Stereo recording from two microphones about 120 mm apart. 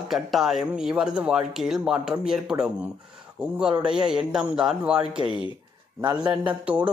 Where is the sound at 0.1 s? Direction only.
Centre (ahead or behind).